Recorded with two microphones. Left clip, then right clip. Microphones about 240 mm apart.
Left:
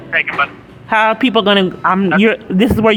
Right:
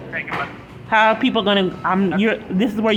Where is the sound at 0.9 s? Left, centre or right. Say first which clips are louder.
Left 3 dB; left.